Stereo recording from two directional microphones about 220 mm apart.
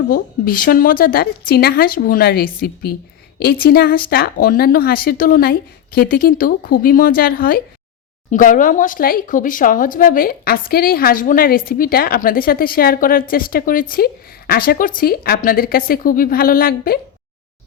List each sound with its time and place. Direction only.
0.1 s speech: 40° left (ahead or behind)